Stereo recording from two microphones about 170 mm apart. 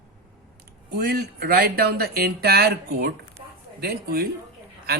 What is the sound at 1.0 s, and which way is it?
Speech, 70° right (ahead or behind).